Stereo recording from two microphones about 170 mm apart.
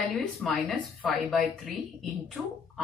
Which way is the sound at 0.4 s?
Centre (ahead or behind).